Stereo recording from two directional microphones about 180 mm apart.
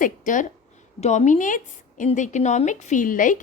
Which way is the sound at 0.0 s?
45° left (ahead or behind).